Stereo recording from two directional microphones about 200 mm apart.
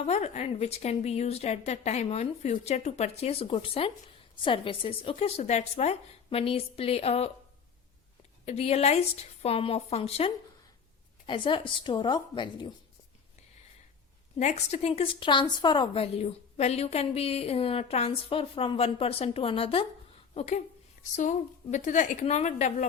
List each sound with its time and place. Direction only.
0.0 s a woman's voice: 35° left (ahead or behind)
8.4 s a woman's voice: 30° left (ahead or behind)
14.3 s a woman's voice: 35° left (ahead or behind)